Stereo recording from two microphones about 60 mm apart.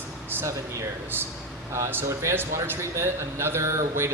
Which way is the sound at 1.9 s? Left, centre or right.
Right.